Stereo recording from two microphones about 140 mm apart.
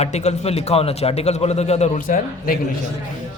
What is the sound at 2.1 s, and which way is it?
Speech, 80° left.